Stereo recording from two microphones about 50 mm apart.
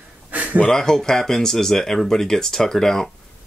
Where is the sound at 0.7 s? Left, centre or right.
Centre.